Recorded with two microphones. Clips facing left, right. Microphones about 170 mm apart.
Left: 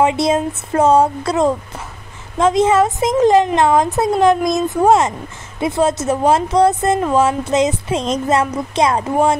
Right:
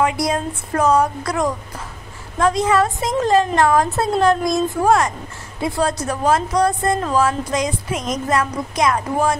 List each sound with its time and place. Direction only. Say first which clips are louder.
0.0 s speech: left 4 dB; 25° left (ahead or behind)